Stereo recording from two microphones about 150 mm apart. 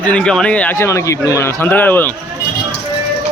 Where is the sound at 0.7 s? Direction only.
20° left (ahead or behind).